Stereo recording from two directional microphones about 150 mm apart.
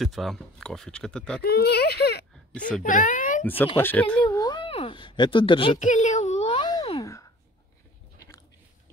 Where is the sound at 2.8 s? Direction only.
60° left (ahead or behind).